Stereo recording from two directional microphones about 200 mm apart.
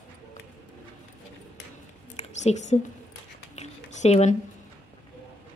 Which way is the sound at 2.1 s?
35° left (ahead or behind).